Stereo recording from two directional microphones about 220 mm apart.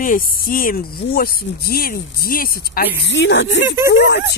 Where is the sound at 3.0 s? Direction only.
55° left (ahead or behind).